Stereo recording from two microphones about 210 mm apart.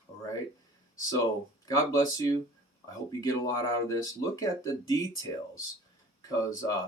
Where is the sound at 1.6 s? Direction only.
15° left (ahead or behind).